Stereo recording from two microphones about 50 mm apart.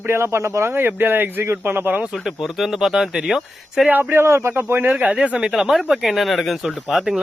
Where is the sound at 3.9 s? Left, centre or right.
Right.